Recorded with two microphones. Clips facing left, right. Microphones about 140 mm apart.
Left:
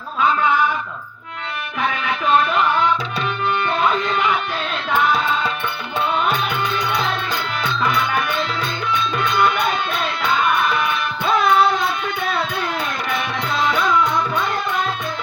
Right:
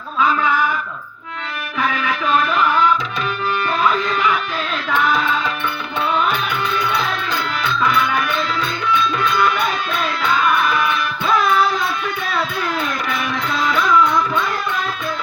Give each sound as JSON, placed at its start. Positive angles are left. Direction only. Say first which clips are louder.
{"t": 9.3, "sound": "music", "louder": "even", "side_deg": 25}
{"t": 13.5, "sound": "music", "louder": "right 1 dB", "side_deg": 25}